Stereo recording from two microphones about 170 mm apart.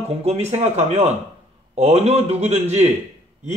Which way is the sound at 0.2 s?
40° right (ahead or behind).